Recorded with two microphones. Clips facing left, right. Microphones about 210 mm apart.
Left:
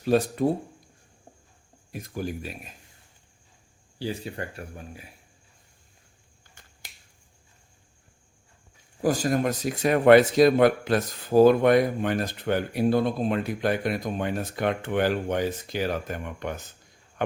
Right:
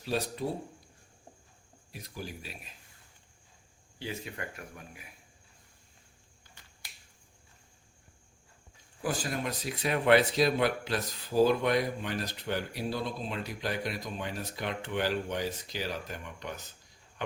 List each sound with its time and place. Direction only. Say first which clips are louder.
0.0 s speech: left 10 dB; 50° left (ahead or behind)
1.9 s speech: left 10 dB; 50° left (ahead or behind)
3.9 s speech: left 7 dB; 35° left (ahead or behind)
6.5 s finger snapping: left 4 dB; 45° left (ahead or behind)
9.0 s speech: left 10 dB; 45° left (ahead or behind)